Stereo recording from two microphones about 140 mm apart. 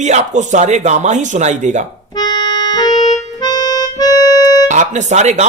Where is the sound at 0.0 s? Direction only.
55° right (ahead or behind).